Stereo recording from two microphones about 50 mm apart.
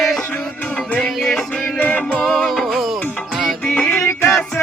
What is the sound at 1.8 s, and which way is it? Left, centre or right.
Music, left.